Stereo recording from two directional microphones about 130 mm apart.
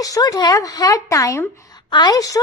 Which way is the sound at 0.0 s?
25° left (ahead or behind).